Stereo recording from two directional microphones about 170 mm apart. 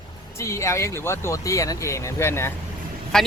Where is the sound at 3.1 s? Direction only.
5° left (ahead or behind).